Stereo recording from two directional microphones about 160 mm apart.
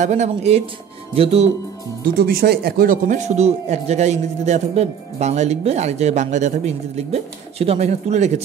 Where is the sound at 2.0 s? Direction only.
70° right (ahead or behind).